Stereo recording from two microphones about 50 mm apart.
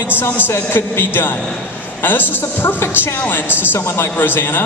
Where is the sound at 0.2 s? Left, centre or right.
Left.